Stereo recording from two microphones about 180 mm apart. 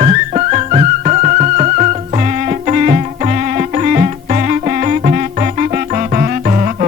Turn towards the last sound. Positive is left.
turn(degrees=-40)  # may be behind; listen again after turning